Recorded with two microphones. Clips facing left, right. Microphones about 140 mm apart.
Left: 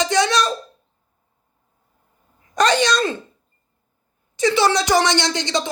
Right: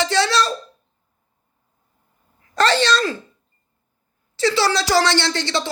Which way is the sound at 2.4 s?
15° left (ahead or behind).